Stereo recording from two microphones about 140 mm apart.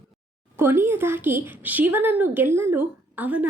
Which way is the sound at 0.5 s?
15° right (ahead or behind).